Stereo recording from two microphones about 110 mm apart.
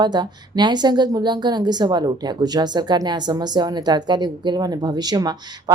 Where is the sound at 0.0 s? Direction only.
40° right (ahead or behind).